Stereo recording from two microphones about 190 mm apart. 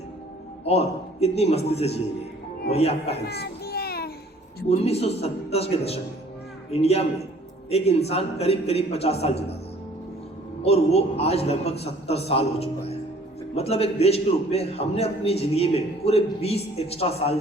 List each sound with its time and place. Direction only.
0.6 s a man's voice: 35° left (ahead or behind)
3.2 s a sound: 55° left (ahead or behind)
4.7 s a man's voice: 35° left (ahead or behind)
10.6 s a man's voice: 35° left (ahead or behind)